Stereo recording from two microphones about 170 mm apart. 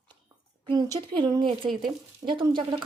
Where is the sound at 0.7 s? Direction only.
20° right (ahead or behind).